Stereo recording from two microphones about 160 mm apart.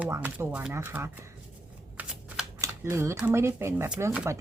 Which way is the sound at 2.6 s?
15° right (ahead or behind).